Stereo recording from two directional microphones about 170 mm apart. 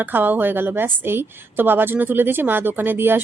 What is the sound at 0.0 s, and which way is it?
A woman's voice, 10° right (ahead or behind).